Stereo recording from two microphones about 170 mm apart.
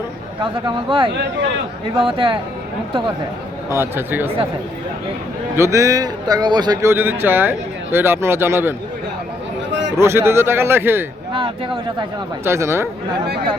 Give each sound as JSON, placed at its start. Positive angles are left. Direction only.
{"t": 0.9, "sound": "a man's voice", "side_deg": -30}
{"t": 3.7, "sound": "speech", "side_deg": -15}
{"t": 5.5, "sound": "a man's voice", "side_deg": -15}
{"t": 6.9, "sound": "speech", "side_deg": -10}
{"t": 10.0, "sound": "speech", "side_deg": -15}
{"t": 12.5, "sound": "speech", "side_deg": -15}